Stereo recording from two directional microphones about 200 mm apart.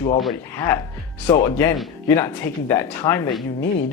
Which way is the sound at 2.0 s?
10° left (ahead or behind).